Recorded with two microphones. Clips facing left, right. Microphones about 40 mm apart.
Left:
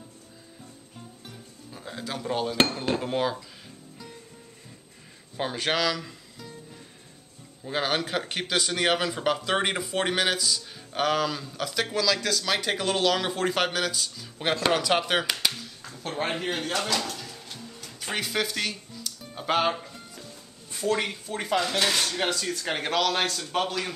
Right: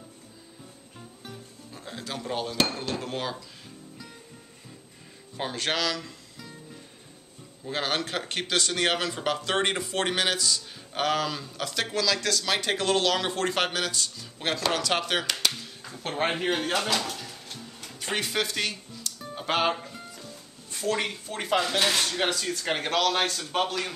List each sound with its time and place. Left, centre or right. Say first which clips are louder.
1.2 s music: right 2 dB; centre
2.9 s speech: left 5 dB; centre
5.4 s speech: left 2 dB; centre
7.6 s speech: left 2 dB; centre
15.6 s a sound: right 1 dB; centre
16.0 s a man's voice: right 2 dB; right
16.3 s speech: right 3 dB; centre
16.6 s drawer open or close: right 1 dB; centre
17.7 s a sound: even; centre
18.0 s music: even; centre
20.7 s speech: left 1 dB; centre